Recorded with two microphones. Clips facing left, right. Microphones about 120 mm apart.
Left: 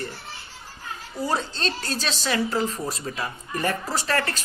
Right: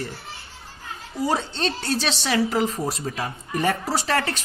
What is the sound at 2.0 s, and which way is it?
Speech, 90° right.